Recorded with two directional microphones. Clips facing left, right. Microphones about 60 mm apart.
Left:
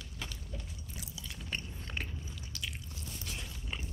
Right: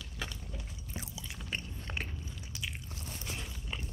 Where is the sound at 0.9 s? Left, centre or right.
Right.